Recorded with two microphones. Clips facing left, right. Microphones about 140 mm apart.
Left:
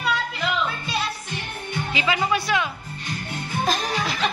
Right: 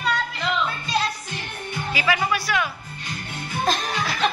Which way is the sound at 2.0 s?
25° left (ahead or behind).